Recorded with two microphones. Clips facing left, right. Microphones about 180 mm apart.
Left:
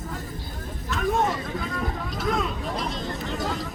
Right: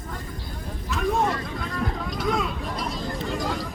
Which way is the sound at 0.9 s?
Centre (ahead or behind).